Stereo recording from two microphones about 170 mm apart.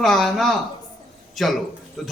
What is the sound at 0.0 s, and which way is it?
A man's voice, centre (ahead or behind).